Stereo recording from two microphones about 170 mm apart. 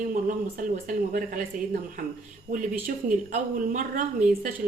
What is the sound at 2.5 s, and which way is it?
Speech, 45° right (ahead or behind).